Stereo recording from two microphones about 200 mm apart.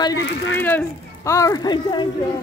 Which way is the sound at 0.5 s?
10° left (ahead or behind).